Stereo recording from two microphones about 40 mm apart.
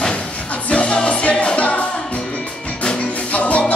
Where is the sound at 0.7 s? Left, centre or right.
Left.